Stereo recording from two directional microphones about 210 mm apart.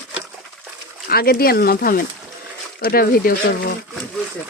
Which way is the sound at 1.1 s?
45° left (ahead or behind).